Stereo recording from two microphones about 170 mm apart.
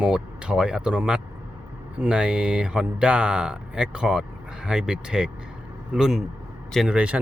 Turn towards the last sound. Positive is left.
turn(degrees=-5)  # may be behind; listen again after turning